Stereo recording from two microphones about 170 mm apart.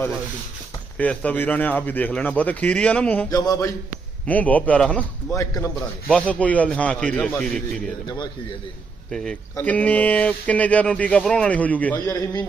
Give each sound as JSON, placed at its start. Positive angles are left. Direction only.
{"t": 0.9, "sound": "speech", "side_deg": 10}
{"t": 3.2, "sound": "a sound", "side_deg": 20}
{"t": 4.3, "sound": "speech", "side_deg": 10}
{"t": 5.3, "sound": "speech", "side_deg": 20}
{"t": 6.1, "sound": "speech", "side_deg": 5}
{"t": 9.0, "sound": "speech", "side_deg": 5}
{"t": 12.0, "sound": "a sound", "side_deg": 20}